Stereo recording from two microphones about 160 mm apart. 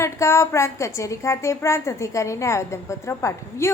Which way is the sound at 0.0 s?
15° left (ahead or behind).